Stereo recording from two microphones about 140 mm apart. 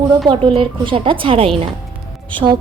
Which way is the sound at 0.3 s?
40° right (ahead or behind).